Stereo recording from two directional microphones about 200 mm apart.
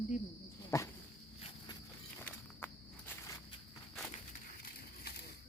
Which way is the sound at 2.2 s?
10° left (ahead or behind).